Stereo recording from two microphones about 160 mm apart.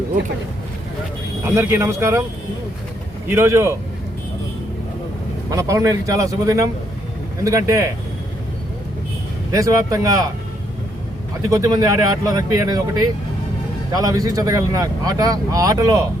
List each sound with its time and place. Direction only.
1.5 s speech: 15° right (ahead or behind)
3.2 s speech: 15° right (ahead or behind)
5.5 s speech: 20° right (ahead or behind)
9.5 s speech: 20° right (ahead or behind)
11.4 s speech: 20° right (ahead or behind)